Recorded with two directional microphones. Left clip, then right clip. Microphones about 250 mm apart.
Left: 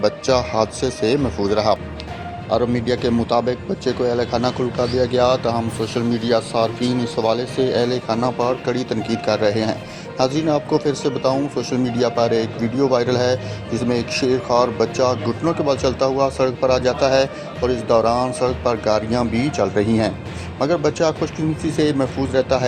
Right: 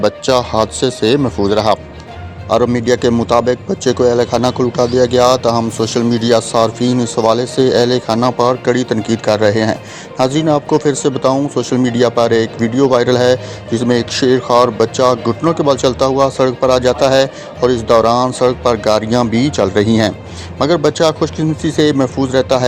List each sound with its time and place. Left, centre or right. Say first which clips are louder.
0.0 s a man's voice: right 5 dB; right